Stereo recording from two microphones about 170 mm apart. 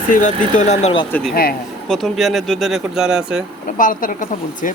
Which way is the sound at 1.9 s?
Centre (ahead or behind).